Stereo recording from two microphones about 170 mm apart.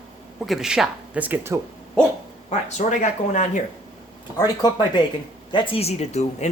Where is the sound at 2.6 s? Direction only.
45° left (ahead or behind).